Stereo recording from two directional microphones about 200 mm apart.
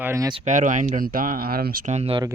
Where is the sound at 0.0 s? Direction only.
15° right (ahead or behind).